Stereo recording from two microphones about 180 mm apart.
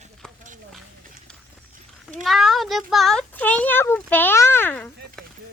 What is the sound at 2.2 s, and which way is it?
A child's voice, centre (ahead or behind).